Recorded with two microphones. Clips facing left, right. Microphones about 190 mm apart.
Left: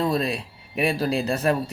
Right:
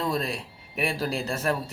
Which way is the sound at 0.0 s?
20° left (ahead or behind).